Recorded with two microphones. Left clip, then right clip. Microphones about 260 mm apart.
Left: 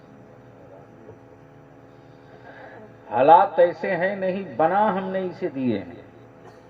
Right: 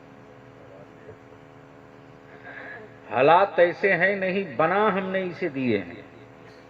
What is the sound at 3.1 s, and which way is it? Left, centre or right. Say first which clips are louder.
Speech: left 3 dB; right.